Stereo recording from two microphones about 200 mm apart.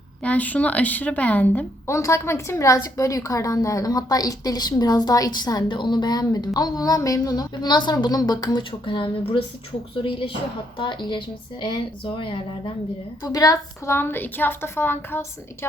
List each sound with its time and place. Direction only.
0.2 s a woman's voice: 5° left (ahead or behind)